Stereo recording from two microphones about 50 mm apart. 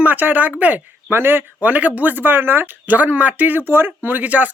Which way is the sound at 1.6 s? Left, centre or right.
Right.